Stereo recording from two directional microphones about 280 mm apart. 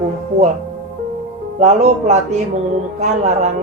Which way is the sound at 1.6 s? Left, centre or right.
Right.